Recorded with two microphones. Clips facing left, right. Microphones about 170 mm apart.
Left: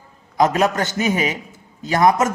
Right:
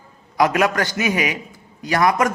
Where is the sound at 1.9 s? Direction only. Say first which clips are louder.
Left 2 dB; 25° left (ahead or behind).